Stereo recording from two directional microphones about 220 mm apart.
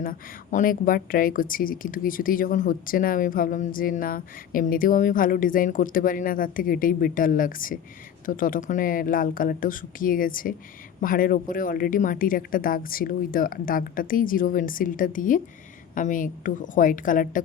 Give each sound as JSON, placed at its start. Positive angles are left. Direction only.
{"t": 0.0, "sound": "a woman's voice", "side_deg": 40}